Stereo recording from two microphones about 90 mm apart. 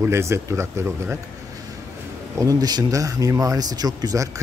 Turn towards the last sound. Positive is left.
turn(degrees=-40)  # may be behind; listen again after turning